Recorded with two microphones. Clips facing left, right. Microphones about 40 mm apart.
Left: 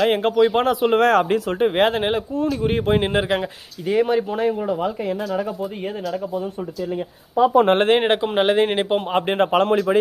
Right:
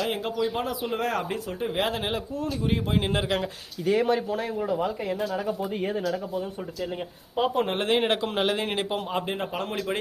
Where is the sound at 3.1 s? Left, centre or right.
Left.